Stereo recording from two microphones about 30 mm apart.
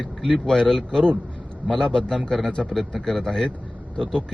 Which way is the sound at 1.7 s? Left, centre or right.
Left.